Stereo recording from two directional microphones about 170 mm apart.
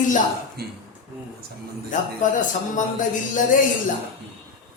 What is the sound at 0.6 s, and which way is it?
Speech, 65° right (ahead or behind).